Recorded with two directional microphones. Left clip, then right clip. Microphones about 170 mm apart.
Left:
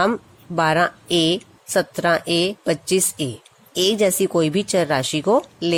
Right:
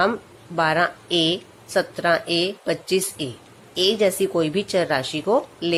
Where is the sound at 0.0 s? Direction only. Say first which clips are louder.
Left 1 dB; 45° left (ahead or behind).